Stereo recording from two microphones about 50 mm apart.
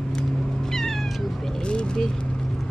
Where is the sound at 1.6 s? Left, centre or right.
Centre.